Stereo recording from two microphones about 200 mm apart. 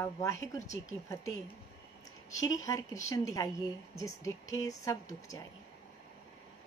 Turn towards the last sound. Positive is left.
turn(degrees=15)  # may be behind; listen again after turning